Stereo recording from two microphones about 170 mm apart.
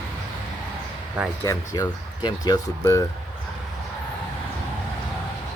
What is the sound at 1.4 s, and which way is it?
Speech, 20° left (ahead or behind).